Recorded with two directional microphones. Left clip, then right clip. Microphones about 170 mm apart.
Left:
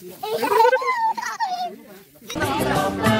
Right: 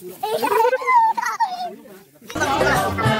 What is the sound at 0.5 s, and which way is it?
Dog, 5° left (ahead or behind).